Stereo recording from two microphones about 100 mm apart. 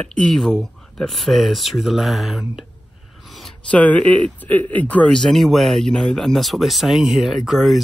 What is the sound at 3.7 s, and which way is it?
Speech, 15° left (ahead or behind).